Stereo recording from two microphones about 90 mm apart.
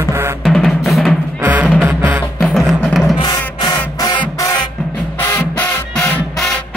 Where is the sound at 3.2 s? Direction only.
50° left (ahead or behind).